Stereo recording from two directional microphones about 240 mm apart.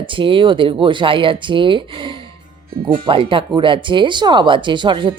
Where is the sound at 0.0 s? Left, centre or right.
Right.